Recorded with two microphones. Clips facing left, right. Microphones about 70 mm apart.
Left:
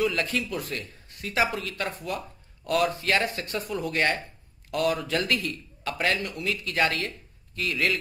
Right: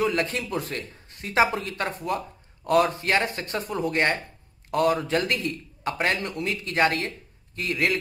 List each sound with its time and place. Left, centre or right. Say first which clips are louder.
0.0 s a man's voice: right 1 dB; right